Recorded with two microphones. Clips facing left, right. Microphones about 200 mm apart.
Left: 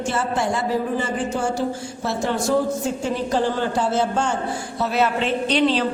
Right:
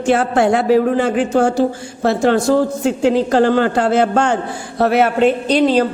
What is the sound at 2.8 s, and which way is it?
A man's voice, 90° right.